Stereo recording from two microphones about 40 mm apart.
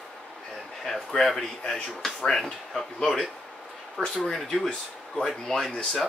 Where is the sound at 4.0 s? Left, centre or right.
Centre.